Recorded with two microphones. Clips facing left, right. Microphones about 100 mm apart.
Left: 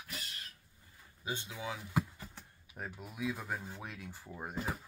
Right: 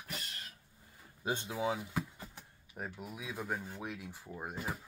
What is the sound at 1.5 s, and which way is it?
Speech, 30° right (ahead or behind).